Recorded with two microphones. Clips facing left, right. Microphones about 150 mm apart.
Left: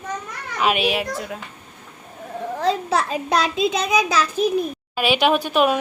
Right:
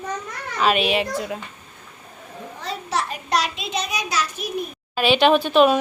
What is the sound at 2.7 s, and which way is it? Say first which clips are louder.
Speech: left 10 dB; 90° left.